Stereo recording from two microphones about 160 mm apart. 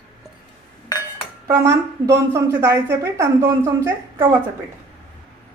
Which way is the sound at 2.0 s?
15° right (ahead or behind).